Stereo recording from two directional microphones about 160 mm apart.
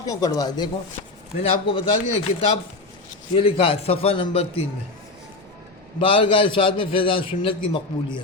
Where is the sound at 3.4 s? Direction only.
35° left (ahead or behind).